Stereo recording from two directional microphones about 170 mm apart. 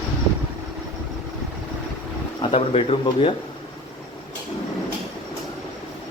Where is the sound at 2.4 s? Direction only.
35° left (ahead or behind).